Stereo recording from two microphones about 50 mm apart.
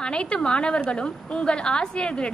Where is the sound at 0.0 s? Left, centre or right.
Centre.